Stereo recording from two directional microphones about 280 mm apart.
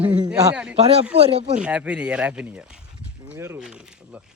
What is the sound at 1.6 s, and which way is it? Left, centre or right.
A man's voice, centre.